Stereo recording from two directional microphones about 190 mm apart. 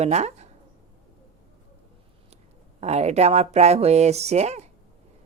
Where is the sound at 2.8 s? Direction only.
35° right (ahead or behind).